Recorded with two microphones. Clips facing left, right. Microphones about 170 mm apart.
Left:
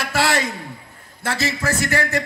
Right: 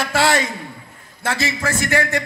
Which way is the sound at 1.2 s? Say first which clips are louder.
Right 1 dB; 30° left (ahead or behind).